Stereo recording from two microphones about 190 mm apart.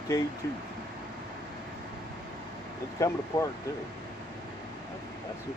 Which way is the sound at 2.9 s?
15° left (ahead or behind).